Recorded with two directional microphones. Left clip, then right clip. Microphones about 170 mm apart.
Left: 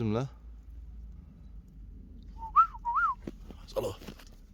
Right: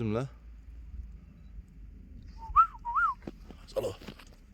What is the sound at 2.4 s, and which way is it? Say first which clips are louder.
Whistling: even; centre (ahead or behind).